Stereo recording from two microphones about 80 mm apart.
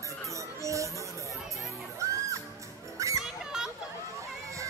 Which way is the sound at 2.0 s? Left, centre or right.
Right.